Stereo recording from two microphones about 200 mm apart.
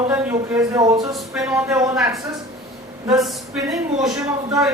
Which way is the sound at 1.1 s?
Centre (ahead or behind).